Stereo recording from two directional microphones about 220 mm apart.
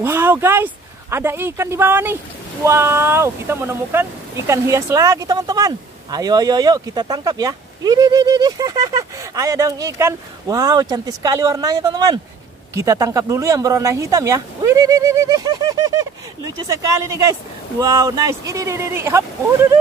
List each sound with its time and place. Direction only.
0.0 s speech: 10° right (ahead or behind)
17.7 s speech: 15° right (ahead or behind)